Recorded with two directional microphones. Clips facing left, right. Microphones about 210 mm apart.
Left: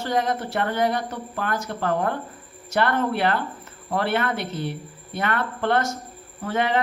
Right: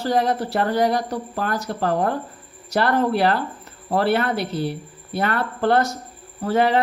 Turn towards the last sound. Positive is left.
turn(degrees=-35)  # may be behind; listen again after turning